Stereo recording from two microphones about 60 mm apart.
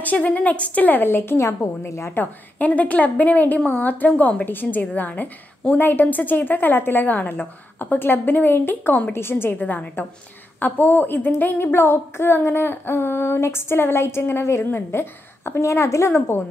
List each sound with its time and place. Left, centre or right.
0.0 s a woman's voice: left
1.9 s a woman's voice: left
2.1 s a woman's voice: left
4.5 s a woman's voice: left
5.8 s a sound: left
9.1 s a sound: left
15.6 s a woman's voice: left